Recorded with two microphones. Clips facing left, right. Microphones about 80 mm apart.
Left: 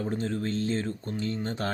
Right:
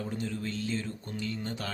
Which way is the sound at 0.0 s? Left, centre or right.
Left.